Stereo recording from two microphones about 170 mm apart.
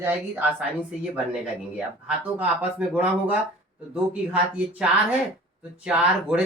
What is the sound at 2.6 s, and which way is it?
Speech, 10° right (ahead or behind).